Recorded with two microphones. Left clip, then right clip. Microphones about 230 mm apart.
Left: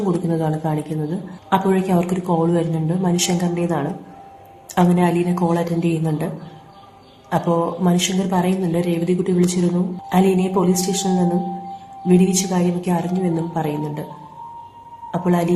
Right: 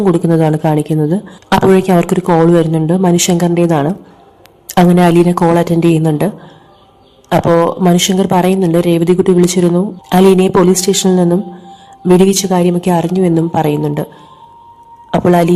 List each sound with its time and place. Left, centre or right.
0.3 s a woman's voice: right
15.1 s a woman's voice: right